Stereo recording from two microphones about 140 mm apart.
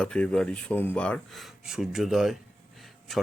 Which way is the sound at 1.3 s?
Centre (ahead or behind).